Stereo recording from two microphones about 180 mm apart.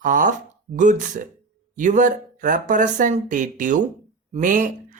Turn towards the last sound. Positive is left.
turn(degrees=-45)  # may be behind; listen again after turning